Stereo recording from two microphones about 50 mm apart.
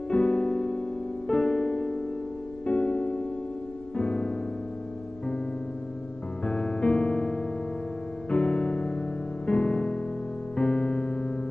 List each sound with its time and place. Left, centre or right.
0.1 s music: left
6.4 s music: centre